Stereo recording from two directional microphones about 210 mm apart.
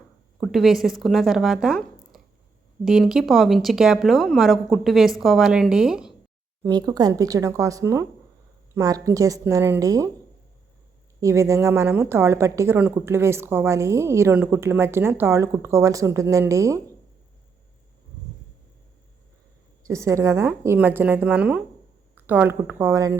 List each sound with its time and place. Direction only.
0.3 s speech: centre (ahead or behind)
6.7 s a woman's voice: 20° right (ahead or behind)
11.2 s a woman's voice: 15° right (ahead or behind)
19.8 s a woman's voice: 15° right (ahead or behind)